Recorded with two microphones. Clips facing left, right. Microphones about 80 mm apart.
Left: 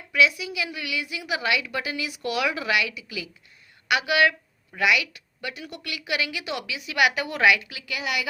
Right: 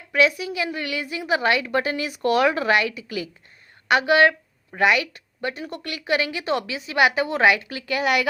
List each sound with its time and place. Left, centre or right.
0.1 s a woman's voice: right